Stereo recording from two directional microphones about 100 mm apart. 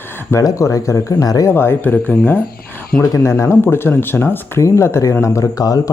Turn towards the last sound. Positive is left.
turn(degrees=35)  # may be behind; listen again after turning